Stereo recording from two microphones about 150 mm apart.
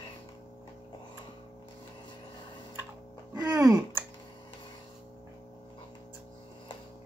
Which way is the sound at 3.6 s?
5° right (ahead or behind).